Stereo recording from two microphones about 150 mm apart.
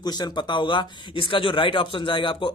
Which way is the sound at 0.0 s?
25° left (ahead or behind).